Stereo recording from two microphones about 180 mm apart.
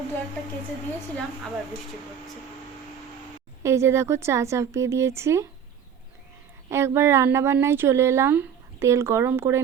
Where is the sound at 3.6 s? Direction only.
15° right (ahead or behind).